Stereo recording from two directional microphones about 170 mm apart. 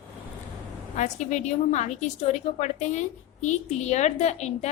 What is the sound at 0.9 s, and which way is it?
A woman's voice, 45° left (ahead or behind).